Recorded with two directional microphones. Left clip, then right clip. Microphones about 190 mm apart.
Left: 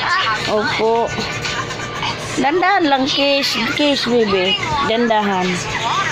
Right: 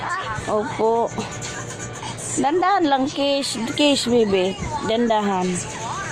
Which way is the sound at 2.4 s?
20° right (ahead or behind).